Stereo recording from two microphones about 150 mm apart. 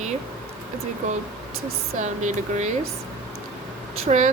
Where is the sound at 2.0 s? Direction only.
55° right (ahead or behind).